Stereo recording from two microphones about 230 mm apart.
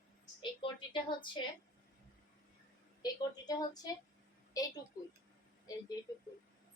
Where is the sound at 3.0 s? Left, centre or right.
Centre.